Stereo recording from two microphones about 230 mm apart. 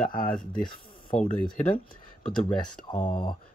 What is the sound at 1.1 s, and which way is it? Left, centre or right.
Speech, centre.